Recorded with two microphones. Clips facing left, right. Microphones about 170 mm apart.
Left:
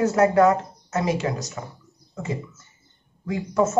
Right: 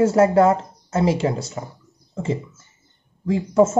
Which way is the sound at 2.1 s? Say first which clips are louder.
Right 5 dB; 25° right (ahead or behind).